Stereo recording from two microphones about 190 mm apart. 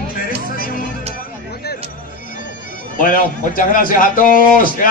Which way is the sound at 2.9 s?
45° left (ahead or behind).